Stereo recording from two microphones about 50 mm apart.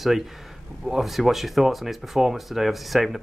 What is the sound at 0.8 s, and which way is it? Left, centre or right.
Speech, centre.